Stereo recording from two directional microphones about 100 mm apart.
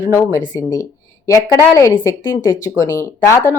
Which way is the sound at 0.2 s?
35° left (ahead or behind).